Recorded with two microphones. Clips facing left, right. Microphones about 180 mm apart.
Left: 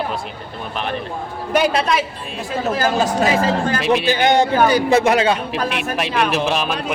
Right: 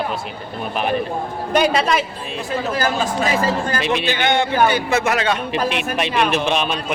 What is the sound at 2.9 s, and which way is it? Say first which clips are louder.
Speech: left 3 dB; 40° left (ahead or behind).